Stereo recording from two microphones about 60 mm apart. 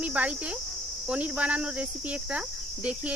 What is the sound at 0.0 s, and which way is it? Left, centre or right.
Cricket, right.